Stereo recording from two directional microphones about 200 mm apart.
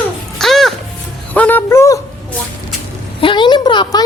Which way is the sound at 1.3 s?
10° left (ahead or behind).